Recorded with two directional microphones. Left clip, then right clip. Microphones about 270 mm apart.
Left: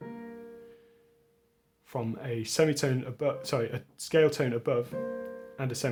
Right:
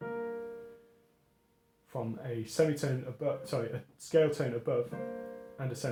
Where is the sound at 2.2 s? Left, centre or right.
Left.